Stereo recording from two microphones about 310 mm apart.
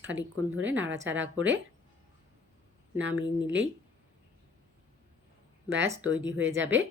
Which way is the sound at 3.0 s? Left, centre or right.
Right.